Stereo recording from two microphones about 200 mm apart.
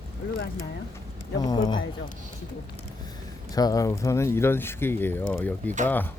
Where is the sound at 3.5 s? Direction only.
20° left (ahead or behind).